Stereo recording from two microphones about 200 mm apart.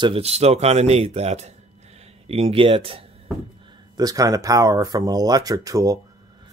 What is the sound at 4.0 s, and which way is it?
Speech, 20° right (ahead or behind).